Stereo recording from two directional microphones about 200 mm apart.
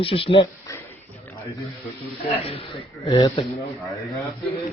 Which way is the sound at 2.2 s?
30° left (ahead or behind).